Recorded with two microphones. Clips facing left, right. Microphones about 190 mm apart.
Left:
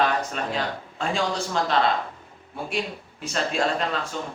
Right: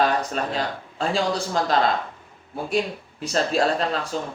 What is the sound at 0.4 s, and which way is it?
Speech, 40° right (ahead or behind).